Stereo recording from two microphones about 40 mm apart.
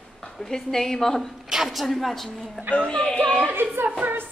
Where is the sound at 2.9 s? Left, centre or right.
Centre.